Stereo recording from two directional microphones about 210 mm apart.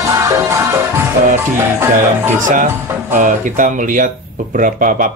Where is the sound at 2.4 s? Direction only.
40° right (ahead or behind).